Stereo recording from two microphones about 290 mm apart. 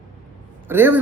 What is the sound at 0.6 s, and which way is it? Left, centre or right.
Speech, centre.